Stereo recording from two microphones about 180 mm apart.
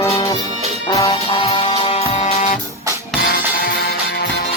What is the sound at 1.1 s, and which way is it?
Music, 30° left (ahead or behind).